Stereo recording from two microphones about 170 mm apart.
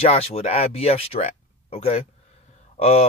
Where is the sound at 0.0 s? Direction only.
35° left (ahead or behind).